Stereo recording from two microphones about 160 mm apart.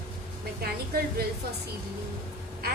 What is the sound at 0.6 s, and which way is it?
Speech, 75° right (ahead or behind).